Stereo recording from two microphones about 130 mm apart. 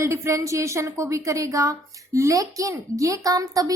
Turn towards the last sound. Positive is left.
turn(degrees=-30)  # may be behind; listen again after turning